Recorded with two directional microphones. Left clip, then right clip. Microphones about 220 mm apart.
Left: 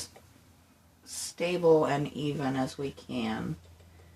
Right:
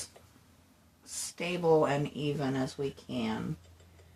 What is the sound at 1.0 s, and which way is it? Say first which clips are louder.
Speech: left 4 dB; 20° right (ahead or behind).